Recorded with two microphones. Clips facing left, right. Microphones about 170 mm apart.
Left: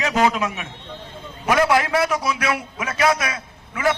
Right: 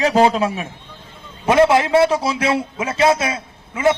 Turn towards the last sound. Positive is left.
turn(degrees=-25)  # may be behind; listen again after turning